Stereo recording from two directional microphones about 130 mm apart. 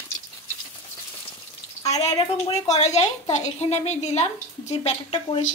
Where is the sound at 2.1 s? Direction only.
50° left (ahead or behind).